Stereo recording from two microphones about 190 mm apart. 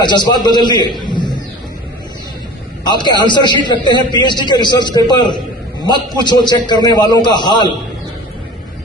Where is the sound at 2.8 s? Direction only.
20° left (ahead or behind).